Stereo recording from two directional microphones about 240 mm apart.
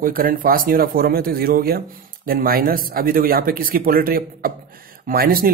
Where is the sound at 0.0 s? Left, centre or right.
Right.